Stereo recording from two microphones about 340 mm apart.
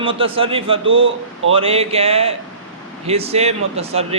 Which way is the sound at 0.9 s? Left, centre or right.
Right.